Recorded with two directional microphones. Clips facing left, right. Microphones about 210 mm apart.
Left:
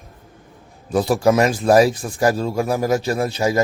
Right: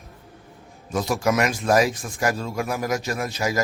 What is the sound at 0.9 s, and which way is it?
Speech, 30° left (ahead or behind).